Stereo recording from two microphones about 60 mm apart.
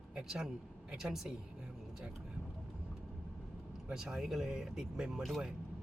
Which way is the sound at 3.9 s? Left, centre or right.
Centre.